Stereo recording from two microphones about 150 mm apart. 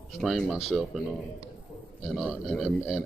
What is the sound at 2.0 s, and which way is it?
Speech, centre (ahead or behind).